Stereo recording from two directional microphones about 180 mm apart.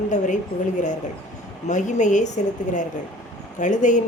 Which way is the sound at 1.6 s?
45° left (ahead or behind).